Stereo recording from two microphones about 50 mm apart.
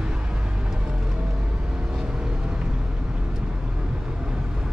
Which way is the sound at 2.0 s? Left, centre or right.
Centre.